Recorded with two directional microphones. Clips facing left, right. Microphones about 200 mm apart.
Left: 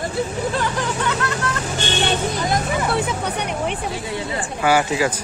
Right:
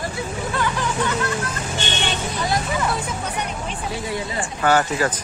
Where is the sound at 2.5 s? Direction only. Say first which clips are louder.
Left 1 dB; 65° left (ahead or behind).